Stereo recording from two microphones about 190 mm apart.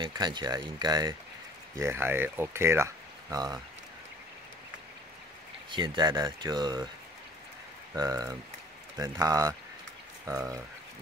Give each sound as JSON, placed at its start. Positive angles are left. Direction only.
{"t": 0.0, "sound": "speech", "side_deg": -25}
{"t": 5.7, "sound": "speech", "side_deg": -25}
{"t": 7.9, "sound": "speech", "side_deg": -20}